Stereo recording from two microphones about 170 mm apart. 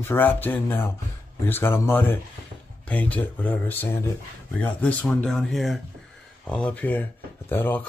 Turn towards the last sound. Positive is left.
turn(degrees=10)  # may be behind; listen again after turning